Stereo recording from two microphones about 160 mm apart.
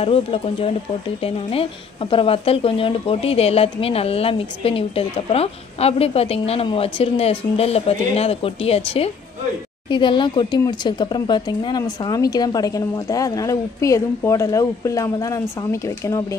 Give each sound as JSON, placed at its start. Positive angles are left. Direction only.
{"t": 0.0, "sound": "speech", "side_deg": 35}